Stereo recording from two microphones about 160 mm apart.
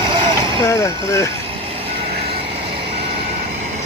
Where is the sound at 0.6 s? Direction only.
20° left (ahead or behind).